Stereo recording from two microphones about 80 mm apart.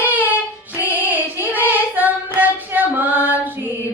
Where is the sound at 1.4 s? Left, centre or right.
Right.